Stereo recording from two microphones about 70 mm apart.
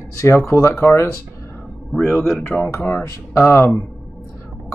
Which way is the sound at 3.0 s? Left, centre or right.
Left.